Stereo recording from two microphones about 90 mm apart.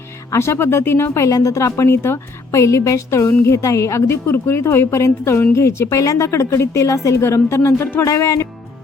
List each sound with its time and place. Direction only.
0.3 s a woman's voice: 30° left (ahead or behind)